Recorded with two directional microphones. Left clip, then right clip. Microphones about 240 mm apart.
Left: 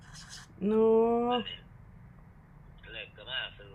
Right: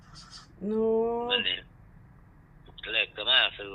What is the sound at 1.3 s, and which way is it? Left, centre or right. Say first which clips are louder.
Speech: right 4 dB; right.